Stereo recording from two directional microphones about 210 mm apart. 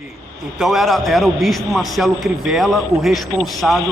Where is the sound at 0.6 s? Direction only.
Centre (ahead or behind).